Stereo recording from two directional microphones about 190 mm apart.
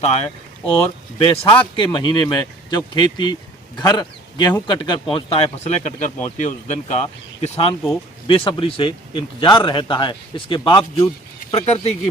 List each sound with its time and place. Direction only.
0.0 s speech: 35° left (ahead or behind)
11.5 s speech: 35° left (ahead or behind)